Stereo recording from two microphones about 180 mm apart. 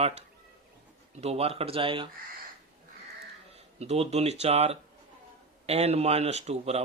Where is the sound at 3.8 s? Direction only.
35° right (ahead or behind).